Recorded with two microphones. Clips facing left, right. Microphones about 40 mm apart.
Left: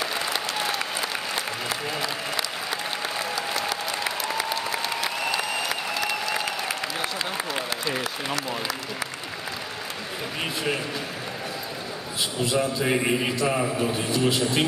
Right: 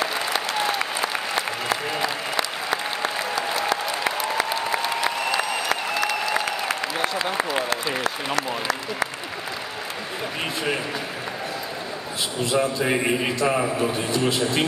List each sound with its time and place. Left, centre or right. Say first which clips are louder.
0.0 s applause: right 3 dB; centre
12.4 s a man's voice: right 2 dB; centre